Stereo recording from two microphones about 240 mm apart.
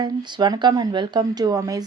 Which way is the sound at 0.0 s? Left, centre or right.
Centre.